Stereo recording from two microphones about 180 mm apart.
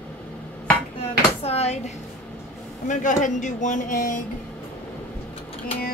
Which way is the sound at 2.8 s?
45° left (ahead or behind).